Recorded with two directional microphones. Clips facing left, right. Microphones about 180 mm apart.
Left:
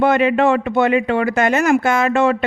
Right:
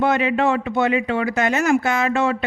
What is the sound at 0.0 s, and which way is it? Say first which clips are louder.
Speech: left 4 dB; 60° left (ahead or behind).